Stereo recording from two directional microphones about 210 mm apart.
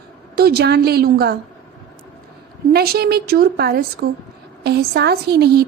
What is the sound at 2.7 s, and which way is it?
A woman's voice, 50° right (ahead or behind).